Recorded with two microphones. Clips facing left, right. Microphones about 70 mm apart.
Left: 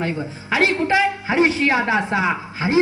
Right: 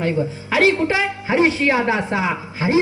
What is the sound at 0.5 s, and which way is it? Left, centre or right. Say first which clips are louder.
A woman's voice: right 1 dB; centre.